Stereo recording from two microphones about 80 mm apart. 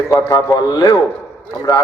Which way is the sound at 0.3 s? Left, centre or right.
Left.